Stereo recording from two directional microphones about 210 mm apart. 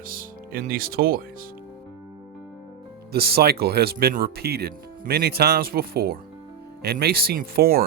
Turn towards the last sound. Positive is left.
turn(degrees=-45)  # may be behind; listen again after turning